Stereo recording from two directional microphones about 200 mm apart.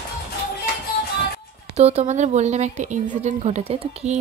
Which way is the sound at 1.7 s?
30° right (ahead or behind).